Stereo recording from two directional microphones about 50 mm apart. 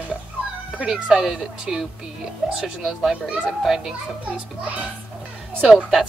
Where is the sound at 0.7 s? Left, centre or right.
Centre.